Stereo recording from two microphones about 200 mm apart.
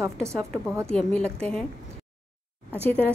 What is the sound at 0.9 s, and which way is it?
Speech, 5° left (ahead or behind).